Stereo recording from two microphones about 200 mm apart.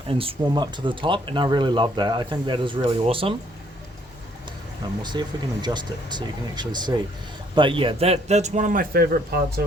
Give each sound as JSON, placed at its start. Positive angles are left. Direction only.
{"t": 0.1, "sound": "speech", "side_deg": -30}
{"t": 5.2, "sound": "a man's voice", "side_deg": -20}